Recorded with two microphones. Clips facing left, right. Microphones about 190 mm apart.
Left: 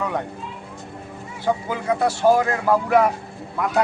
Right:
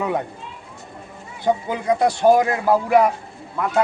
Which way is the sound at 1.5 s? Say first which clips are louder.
Right 2 dB; 20° right (ahead or behind).